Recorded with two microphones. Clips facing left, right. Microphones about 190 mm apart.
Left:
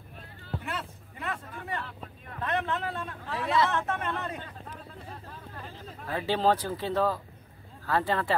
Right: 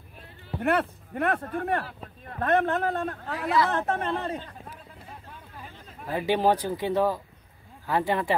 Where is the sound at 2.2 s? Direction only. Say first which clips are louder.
Right 7 dB; 45° right (ahead or behind).